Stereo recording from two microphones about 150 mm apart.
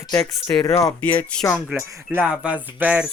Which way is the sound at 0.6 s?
20° left (ahead or behind).